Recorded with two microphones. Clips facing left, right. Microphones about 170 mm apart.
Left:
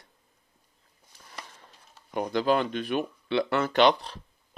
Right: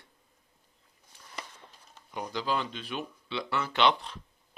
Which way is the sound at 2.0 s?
55° left (ahead or behind).